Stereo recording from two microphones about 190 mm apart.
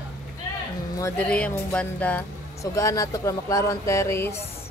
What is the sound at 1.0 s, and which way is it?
Speech, 5° left (ahead or behind).